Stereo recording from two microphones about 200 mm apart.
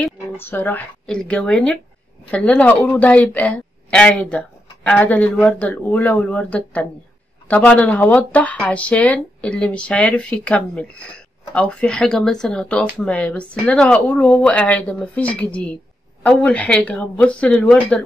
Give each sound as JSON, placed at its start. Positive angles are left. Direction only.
{"t": 0.0, "sound": "speech", "side_deg": 10}